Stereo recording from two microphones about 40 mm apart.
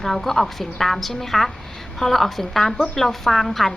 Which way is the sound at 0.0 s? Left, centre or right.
Centre.